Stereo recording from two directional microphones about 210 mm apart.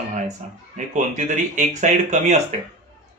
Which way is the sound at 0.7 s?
35° right (ahead or behind).